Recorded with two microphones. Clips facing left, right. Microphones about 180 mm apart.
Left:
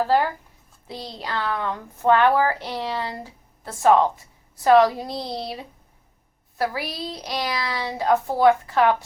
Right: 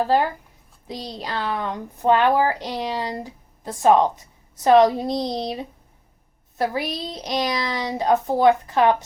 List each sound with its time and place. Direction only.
0.9 s a woman's voice: 15° right (ahead or behind)